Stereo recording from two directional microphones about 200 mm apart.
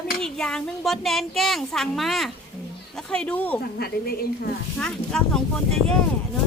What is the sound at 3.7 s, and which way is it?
Speech, 50° left (ahead or behind).